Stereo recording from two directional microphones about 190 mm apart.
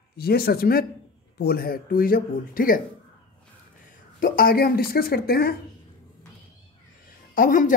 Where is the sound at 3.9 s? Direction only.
45° left (ahead or behind).